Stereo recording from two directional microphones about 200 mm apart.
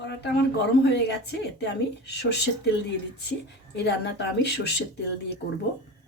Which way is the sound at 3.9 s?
55° left (ahead or behind).